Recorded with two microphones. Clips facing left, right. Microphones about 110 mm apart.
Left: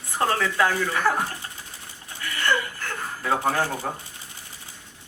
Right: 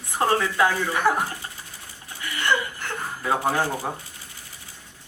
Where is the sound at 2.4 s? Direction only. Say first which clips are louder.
Right 1 dB; 15° right (ahead or behind).